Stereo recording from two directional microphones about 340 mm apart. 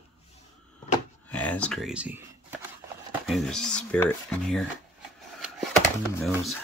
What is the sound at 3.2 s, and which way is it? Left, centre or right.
Speech, centre.